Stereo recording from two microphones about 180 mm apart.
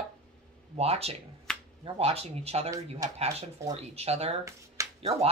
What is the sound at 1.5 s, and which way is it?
Finger snapping, 5° left (ahead or behind).